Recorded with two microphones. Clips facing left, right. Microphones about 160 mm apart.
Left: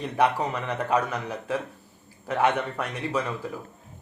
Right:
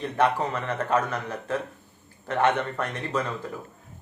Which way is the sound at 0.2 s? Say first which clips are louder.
Even; 10° left (ahead or behind).